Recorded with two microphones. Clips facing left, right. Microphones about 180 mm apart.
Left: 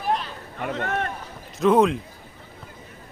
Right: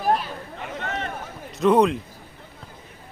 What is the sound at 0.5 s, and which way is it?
Speech, 55° left (ahead or behind).